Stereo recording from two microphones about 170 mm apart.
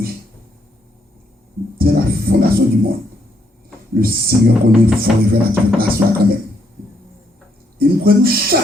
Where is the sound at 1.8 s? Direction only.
60° right (ahead or behind).